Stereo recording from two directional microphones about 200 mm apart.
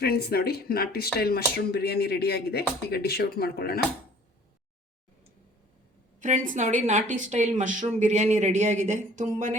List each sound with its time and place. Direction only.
0.0 s speech: 50° left (ahead or behind)
6.2 s a woman's voice: 40° right (ahead or behind)